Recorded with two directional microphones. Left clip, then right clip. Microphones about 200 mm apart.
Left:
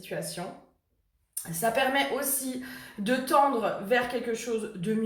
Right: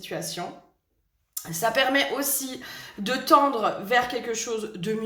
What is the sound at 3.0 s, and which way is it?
A woman's voice, 50° right (ahead or behind).